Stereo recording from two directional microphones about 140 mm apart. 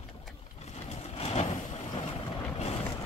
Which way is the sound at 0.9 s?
45° left (ahead or behind).